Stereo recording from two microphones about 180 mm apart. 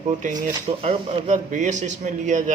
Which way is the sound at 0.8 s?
35° right (ahead or behind).